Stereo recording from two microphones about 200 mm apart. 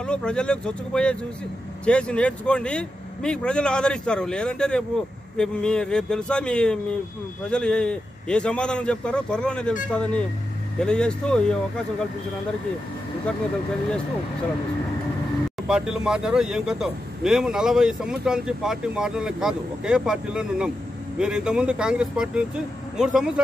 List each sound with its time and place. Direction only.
0.0 s a man's voice: 5° left (ahead or behind)
15.7 s a man's voice: 5° right (ahead or behind)